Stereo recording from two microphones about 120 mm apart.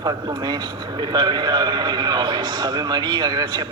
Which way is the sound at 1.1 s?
35° right (ahead or behind).